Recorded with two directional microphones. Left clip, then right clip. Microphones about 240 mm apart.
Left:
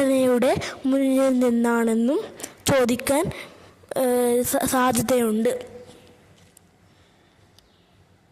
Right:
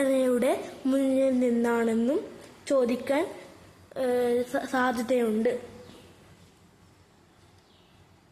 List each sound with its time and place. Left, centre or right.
0.0 s speech: left